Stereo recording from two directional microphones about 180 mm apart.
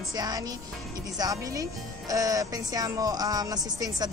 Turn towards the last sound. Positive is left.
turn(degrees=-20)  # may be behind; listen again after turning